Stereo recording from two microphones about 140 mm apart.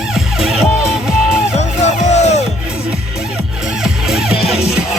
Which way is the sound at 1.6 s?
55° left (ahead or behind).